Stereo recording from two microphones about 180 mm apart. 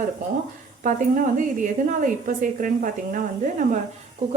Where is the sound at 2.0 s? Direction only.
50° right (ahead or behind).